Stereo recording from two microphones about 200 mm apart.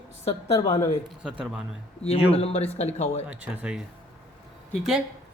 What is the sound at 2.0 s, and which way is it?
Speech, 30° left (ahead or behind).